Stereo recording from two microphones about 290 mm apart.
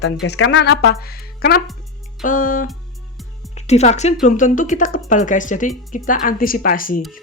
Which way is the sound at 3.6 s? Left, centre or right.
Left.